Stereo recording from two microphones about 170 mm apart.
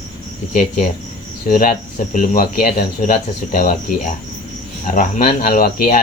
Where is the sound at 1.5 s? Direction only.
55° left (ahead or behind).